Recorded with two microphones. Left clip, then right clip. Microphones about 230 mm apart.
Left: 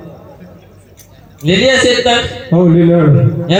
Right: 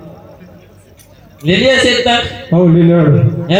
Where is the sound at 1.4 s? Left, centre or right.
Left.